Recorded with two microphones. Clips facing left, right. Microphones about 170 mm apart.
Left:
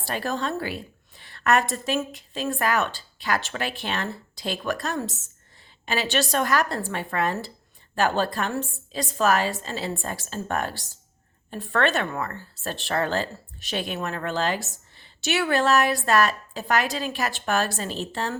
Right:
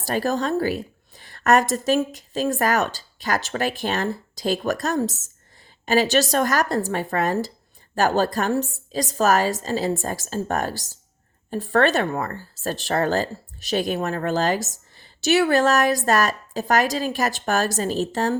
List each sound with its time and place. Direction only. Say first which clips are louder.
0.0 s speech: right 5 dB; 40° right (ahead or behind)